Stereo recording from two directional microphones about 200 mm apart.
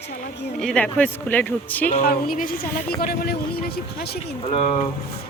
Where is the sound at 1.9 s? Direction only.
45° left (ahead or behind).